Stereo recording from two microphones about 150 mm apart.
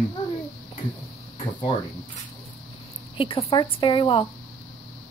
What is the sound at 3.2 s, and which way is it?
A woman's voice, 35° left (ahead or behind).